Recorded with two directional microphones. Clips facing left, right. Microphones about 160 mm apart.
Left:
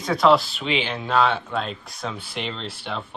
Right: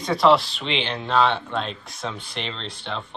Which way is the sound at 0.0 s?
Centre (ahead or behind).